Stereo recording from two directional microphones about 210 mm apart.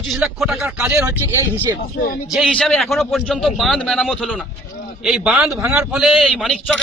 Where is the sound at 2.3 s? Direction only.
Centre (ahead or behind).